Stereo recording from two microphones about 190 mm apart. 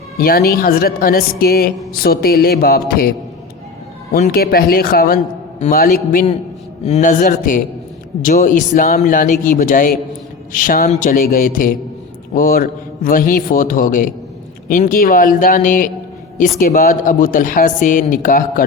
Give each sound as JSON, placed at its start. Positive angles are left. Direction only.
{"t": 0.2, "sound": "a man's voice", "side_deg": 50}
{"t": 4.2, "sound": "a man's voice", "side_deg": 50}